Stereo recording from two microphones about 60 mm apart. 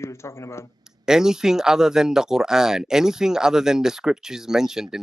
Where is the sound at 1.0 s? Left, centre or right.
Centre.